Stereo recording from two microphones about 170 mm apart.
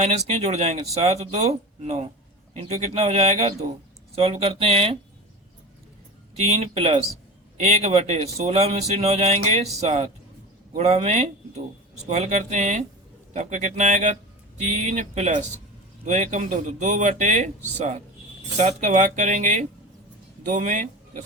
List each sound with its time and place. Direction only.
0.0 s speech: 40° right (ahead or behind)
6.6 s speech: 35° right (ahead or behind)